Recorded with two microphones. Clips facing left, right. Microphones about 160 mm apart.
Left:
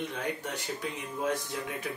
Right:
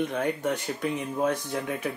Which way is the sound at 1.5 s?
55° right (ahead or behind).